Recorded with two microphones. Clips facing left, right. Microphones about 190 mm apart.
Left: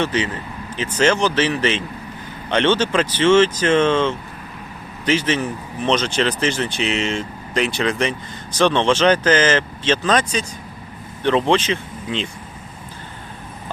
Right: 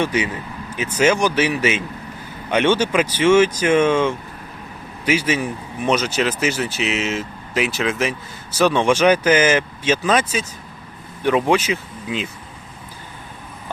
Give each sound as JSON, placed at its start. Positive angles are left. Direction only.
{"t": 0.0, "sound": "speech", "side_deg": -10}